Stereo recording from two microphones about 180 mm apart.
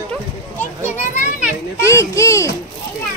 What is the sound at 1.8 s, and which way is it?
Speech, 15° left (ahead or behind).